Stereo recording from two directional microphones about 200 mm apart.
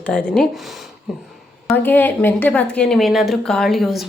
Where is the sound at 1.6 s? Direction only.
10° left (ahead or behind).